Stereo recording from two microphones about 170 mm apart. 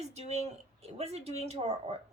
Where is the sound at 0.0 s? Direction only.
40° right (ahead or behind).